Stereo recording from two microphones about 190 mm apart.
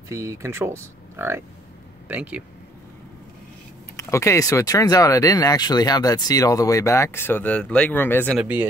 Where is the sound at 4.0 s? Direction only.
15° left (ahead or behind).